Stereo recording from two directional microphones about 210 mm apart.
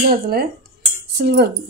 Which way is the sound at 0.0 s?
45° right (ahead or behind).